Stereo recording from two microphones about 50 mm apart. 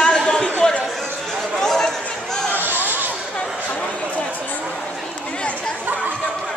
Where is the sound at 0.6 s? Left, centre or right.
Centre.